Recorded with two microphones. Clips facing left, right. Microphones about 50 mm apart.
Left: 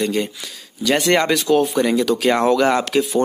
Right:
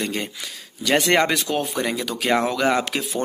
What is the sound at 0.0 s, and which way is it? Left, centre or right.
Speech, centre.